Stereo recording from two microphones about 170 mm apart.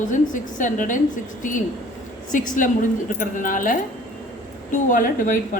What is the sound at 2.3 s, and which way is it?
A woman's voice, 50° left (ahead or behind).